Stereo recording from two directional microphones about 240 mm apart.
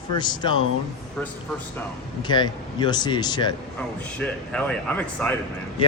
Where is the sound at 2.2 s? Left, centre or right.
Centre.